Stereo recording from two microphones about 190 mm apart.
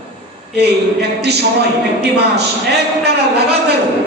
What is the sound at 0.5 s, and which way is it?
A man's voice, 60° right (ahead or behind).